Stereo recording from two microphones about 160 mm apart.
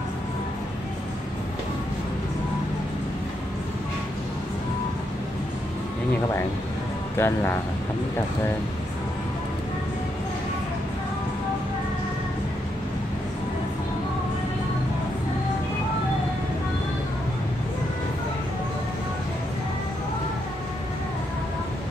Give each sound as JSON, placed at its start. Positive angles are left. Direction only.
{"t": 7.2, "sound": "speech", "side_deg": 15}